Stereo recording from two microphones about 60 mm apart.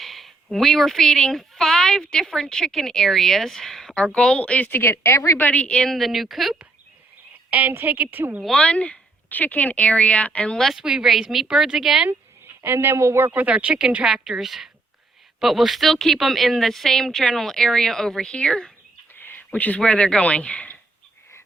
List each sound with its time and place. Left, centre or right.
0.0 s speech: centre; by 4.8 s left
4.8 s speech: left
5.5 s speech: centre
5.8 s speech: centre
7.5 s a woman's voice: right
8.5 s speech: centre
10.8 s a woman's voice: centre
12.6 s speech: right
13.2 s speech: right
14.0 s a woman's voice: centre
19.2 s a sound: left
19.5 s speech: left
19.8 s speech: centre